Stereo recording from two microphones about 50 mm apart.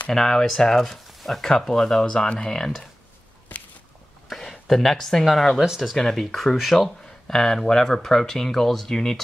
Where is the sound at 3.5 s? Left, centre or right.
Left.